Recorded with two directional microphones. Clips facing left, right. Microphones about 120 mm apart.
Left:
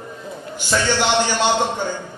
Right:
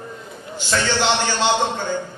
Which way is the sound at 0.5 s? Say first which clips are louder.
Left 1 dB; 15° left (ahead or behind).